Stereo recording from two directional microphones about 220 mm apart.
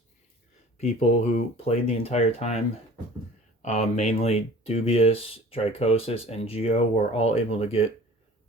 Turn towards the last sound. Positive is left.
turn(degrees=25)  # may be behind; listen again after turning